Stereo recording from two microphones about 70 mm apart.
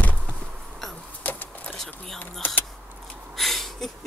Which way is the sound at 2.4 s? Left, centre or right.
Left.